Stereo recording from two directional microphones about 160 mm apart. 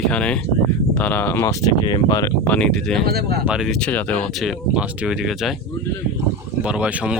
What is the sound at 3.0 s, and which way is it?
Speech, 75° right (ahead or behind).